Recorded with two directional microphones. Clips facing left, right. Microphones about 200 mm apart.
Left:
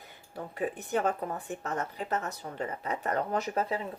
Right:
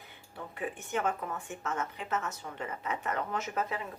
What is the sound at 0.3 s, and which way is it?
Speech, 40° left (ahead or behind).